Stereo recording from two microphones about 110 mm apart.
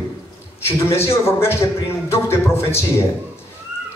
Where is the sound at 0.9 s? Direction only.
20° left (ahead or behind).